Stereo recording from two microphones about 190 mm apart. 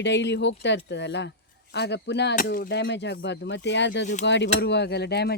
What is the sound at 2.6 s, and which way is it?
Speech, 65° left (ahead or behind).